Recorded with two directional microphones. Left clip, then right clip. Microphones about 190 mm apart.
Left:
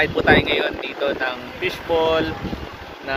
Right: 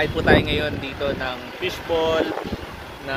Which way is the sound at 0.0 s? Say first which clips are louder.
Left 2 dB; centre (ahead or behind).